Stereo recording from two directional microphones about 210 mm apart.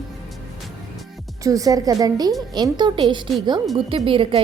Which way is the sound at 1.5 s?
15° right (ahead or behind).